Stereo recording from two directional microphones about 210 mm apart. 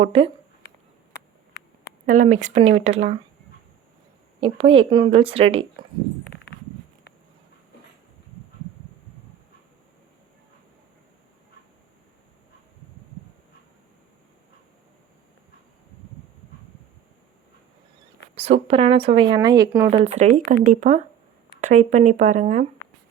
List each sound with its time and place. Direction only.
0.0 s a woman's voice: 25° right (ahead or behind)
2.0 s speech: 35° right (ahead or behind)
4.4 s a woman's voice: 25° right (ahead or behind)
18.3 s a woman's voice: 30° right (ahead or behind)
19.9 s speech: 30° right (ahead or behind)